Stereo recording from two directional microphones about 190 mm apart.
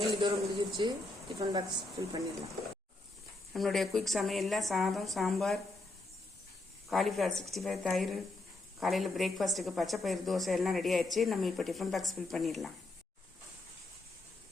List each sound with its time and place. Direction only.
0.0 s a man's voice: 20° right (ahead or behind)
3.5 s a woman's voice: centre (ahead or behind)
6.8 s a woman's voice: centre (ahead or behind)